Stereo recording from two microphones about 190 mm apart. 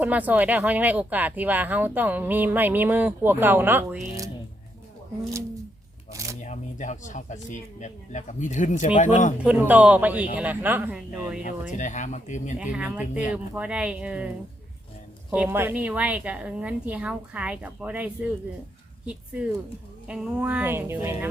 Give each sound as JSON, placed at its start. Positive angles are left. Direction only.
{"t": 0.0, "sound": "speech", "side_deg": -10}
{"t": 6.4, "sound": "speech", "side_deg": 40}
{"t": 9.4, "sound": "speech", "side_deg": -10}
{"t": 11.8, "sound": "speech", "side_deg": 40}
{"t": 12.5, "sound": "speech", "side_deg": -5}
{"t": 15.3, "sound": "speech", "side_deg": -10}